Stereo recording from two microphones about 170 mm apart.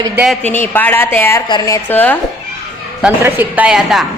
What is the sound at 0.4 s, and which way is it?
A woman's voice, 10° left (ahead or behind).